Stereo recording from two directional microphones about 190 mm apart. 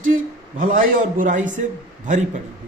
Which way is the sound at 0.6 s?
45° right (ahead or behind).